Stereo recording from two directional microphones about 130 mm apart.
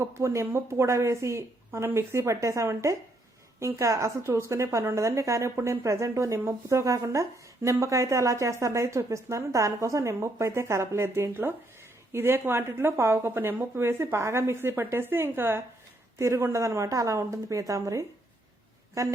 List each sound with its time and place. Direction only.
0.0 s a woman's voice: 20° right (ahead or behind)